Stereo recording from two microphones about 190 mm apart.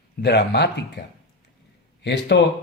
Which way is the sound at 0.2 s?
60° left (ahead or behind).